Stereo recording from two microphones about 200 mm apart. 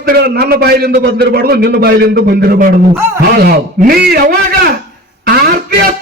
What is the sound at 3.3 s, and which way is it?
A man's voice, 50° right (ahead or behind).